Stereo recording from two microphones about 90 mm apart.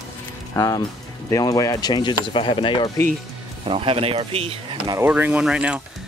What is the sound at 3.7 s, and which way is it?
Speech, 90° right.